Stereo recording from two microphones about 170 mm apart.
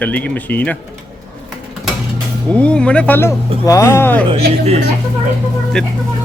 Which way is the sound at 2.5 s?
5° left (ahead or behind).